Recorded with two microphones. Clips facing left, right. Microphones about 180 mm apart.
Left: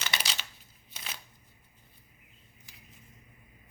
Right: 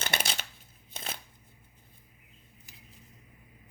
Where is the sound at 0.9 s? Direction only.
50° right (ahead or behind).